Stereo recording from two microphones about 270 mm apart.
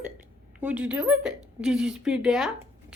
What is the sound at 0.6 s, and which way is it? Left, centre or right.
A woman's voice, centre.